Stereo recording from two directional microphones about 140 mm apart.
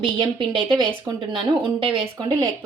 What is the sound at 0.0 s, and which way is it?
Speech, 35° right (ahead or behind).